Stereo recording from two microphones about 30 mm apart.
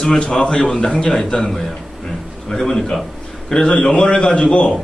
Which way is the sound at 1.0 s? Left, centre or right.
Centre.